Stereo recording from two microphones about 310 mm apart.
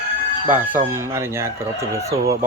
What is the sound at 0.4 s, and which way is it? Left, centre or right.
Speech, centre.